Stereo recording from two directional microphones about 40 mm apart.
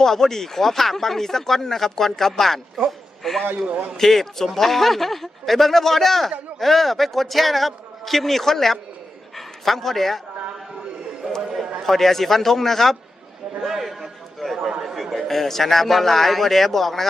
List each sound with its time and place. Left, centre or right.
0.0 s speech: centre
2.8 s a sound: centre
3.9 s a man's voice: centre
11.8 s speech: centre
13.7 s a sound: centre
15.3 s speech: centre